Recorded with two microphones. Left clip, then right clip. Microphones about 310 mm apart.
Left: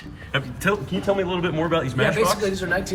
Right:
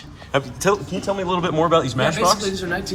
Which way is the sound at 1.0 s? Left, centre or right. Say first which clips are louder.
Right 1 dB; centre.